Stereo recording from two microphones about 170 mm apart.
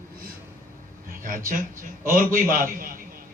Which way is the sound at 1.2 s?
55° right (ahead or behind).